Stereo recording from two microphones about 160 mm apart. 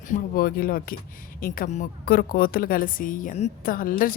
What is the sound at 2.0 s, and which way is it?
A woman's voice, 70° left (ahead or behind).